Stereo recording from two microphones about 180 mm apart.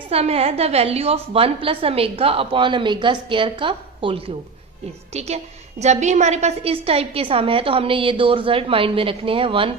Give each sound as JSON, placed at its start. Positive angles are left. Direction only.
{"t": 0.1, "sound": "a woman's voice", "side_deg": -35}